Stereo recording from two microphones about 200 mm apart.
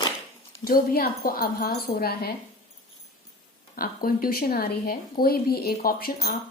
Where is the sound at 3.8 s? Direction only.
45° left (ahead or behind).